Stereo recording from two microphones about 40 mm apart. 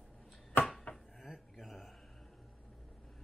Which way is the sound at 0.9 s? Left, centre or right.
Left.